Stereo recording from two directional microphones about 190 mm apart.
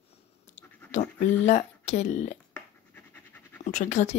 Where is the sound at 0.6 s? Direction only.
10° left (ahead or behind).